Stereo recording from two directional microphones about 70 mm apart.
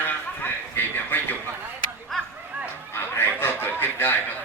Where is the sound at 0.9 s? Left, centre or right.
Left.